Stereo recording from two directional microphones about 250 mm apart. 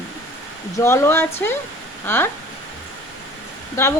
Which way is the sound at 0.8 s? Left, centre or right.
Centre.